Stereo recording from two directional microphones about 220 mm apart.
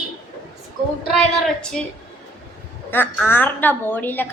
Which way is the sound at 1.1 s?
5° left (ahead or behind).